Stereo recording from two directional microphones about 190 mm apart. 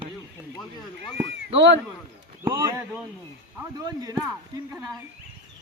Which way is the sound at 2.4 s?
20° right (ahead or behind).